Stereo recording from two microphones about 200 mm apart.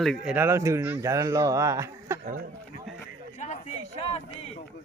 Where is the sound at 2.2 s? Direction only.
50° right (ahead or behind).